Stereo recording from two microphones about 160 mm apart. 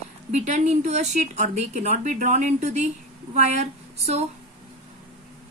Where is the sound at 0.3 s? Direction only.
50° right (ahead or behind).